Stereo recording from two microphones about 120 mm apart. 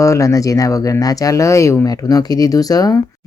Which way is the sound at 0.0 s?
25° left (ahead or behind).